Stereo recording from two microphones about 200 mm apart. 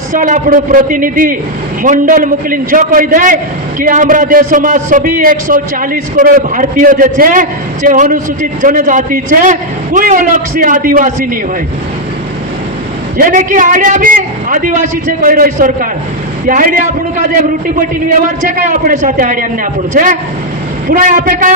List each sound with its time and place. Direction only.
0.1 s a man's voice: 40° right (ahead or behind)
13.1 s a man's voice: 45° right (ahead or behind)
18.7 s a man's voice: 40° right (ahead or behind)